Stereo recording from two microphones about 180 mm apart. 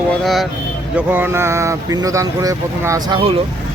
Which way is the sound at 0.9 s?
10° right (ahead or behind).